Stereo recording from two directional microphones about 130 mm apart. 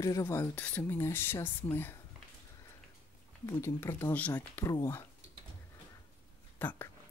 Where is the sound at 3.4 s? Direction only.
20° left (ahead or behind).